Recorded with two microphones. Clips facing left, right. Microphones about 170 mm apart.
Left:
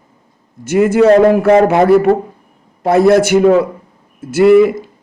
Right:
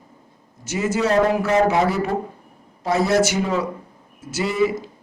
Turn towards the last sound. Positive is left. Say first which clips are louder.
# left 13 dB
turn(degrees=60)  # may be behind; listen again after turning